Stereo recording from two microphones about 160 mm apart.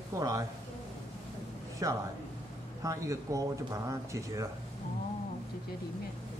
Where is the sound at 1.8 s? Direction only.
20° right (ahead or behind).